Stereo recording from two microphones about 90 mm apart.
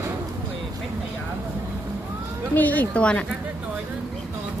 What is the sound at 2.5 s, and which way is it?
Speech, 20° left (ahead or behind).